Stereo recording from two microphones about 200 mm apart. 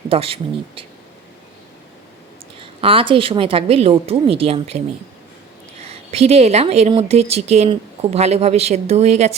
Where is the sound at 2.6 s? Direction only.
25° right (ahead or behind).